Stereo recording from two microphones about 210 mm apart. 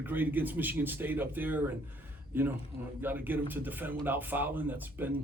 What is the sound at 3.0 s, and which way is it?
Speech, 10° right (ahead or behind).